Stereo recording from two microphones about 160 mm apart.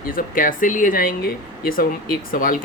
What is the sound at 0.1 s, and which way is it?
Speech, 60° left (ahead or behind).